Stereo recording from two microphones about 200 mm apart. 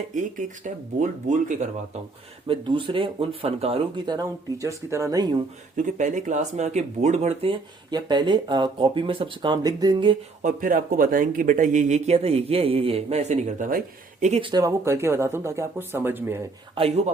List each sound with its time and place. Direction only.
0.1 s speech: 40° right (ahead or behind)
2.5 s speech: 25° right (ahead or behind)
5.7 s speech: 40° right (ahead or behind)
7.9 s speech: 20° right (ahead or behind)
10.4 s speech: 45° right (ahead or behind)
14.5 s speech: 15° right (ahead or behind)
16.7 s speech: 30° right (ahead or behind)